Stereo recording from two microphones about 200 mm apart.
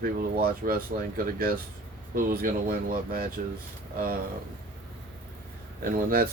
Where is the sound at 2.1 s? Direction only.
45° right (ahead or behind).